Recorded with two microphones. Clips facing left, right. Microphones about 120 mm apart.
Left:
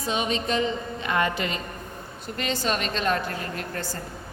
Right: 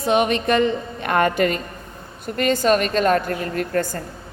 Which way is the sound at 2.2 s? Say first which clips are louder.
Right 9 dB; 50° right (ahead or behind).